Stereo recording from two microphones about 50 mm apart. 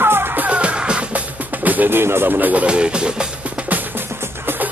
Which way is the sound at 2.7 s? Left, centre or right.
Centre.